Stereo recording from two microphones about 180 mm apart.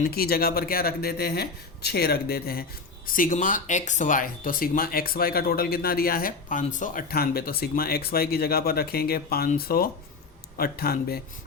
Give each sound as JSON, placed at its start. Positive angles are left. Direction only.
{"t": 0.0, "sound": "speech", "side_deg": 55}